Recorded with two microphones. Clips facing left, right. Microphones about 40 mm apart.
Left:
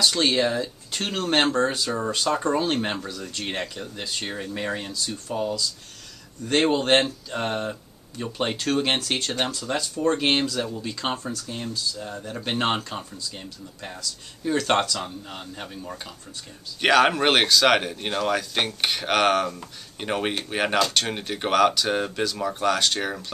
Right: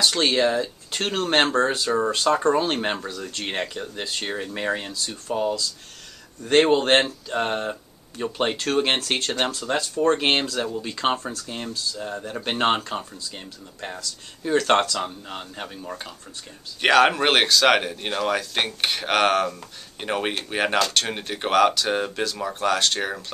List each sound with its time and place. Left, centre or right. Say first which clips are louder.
0.0 s speech: right 1 dB; centre
15.0 s speech: right 3 dB; centre